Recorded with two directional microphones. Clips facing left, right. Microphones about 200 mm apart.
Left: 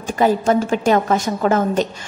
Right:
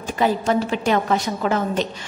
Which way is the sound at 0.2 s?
45° left (ahead or behind).